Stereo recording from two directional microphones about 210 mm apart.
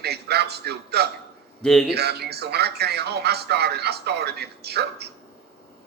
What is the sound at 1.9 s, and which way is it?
Speech, 50° right (ahead or behind).